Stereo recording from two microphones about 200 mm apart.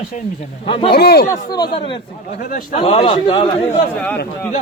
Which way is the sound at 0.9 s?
50° left (ahead or behind).